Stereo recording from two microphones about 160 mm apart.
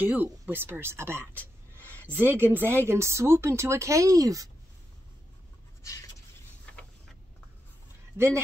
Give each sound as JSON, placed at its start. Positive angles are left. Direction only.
{"t": 0.0, "sound": "speech", "side_deg": -10}
{"t": 5.8, "sound": "writing", "side_deg": 20}